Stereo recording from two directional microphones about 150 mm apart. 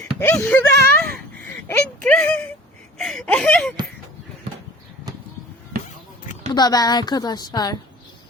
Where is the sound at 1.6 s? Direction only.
10° left (ahead or behind).